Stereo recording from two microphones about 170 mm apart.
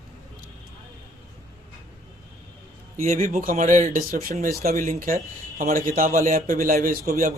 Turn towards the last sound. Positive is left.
turn(degrees=-55)  # may be behind; listen again after turning